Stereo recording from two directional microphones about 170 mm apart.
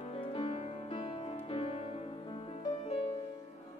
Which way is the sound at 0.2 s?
30° left (ahead or behind).